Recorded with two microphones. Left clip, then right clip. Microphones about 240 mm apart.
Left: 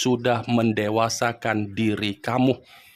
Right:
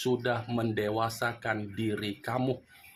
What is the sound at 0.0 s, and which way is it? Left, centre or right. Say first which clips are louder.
Speech: left 8 dB; left.